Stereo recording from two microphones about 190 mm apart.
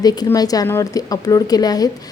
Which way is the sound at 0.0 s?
20° left (ahead or behind).